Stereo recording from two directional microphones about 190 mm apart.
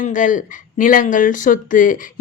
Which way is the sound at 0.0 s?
45° left (ahead or behind).